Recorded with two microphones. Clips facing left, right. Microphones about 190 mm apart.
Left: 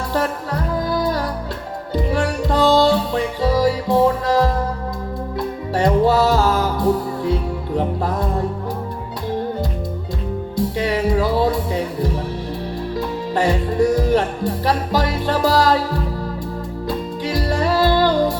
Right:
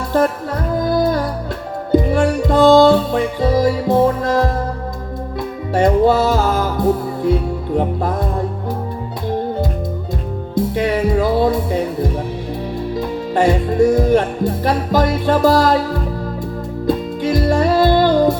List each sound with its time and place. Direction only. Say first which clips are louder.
0.8 s music: right 6 dB; 50° right (ahead or behind)
5.7 s music: right 3 dB; 50° right (ahead or behind)
10.8 s music: right 2 dB; 50° right (ahead or behind)
13.3 s music: right 4 dB; 50° right (ahead or behind)
16.8 s music: right 7 dB; 50° right (ahead or behind)